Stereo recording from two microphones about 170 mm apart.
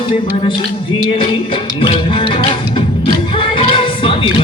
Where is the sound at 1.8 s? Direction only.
30° left (ahead or behind).